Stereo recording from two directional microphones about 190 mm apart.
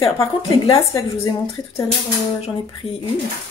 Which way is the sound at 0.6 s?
20° left (ahead or behind).